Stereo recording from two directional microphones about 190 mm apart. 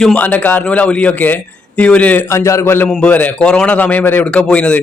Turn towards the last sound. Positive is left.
turn(degrees=5)  # may be behind; listen again after turning